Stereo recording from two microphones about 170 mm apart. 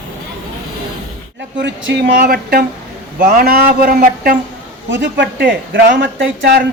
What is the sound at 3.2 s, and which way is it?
Speech, 55° right (ahead or behind).